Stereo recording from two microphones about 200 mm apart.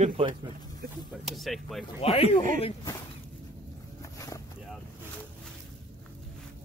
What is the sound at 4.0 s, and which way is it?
Vehicle, 15° left (ahead or behind).